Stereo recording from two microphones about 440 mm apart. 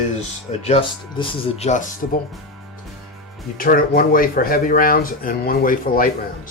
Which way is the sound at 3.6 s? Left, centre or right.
Centre.